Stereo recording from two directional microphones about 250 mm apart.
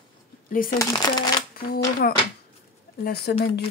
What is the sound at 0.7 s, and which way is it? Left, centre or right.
Speech, centre.